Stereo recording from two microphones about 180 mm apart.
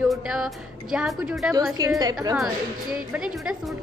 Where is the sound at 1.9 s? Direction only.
20° right (ahead or behind).